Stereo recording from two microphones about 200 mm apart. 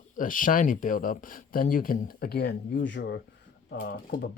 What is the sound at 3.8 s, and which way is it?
Speech, 45° left (ahead or behind).